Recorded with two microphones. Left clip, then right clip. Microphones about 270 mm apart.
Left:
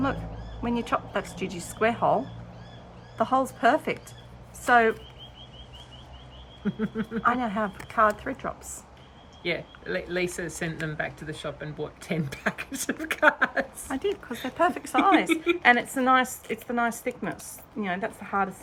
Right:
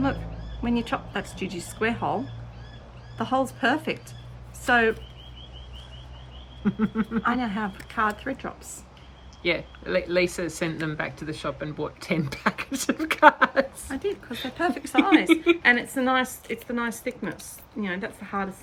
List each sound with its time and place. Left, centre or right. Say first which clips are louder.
0.9 s a woman's voice: left 2 dB; centre
1.4 s speech: right 1 dB; centre
1.8 s a woman's voice: left 3 dB; centre
3.2 s a woman's voice: left 1 dB; centre
6.7 s a sound: right 4 dB; centre
7.2 s a woman's voice: left 2 dB; centre
9.4 s speech: right 4 dB; centre
13.8 s a woman's voice: left 1 dB; centre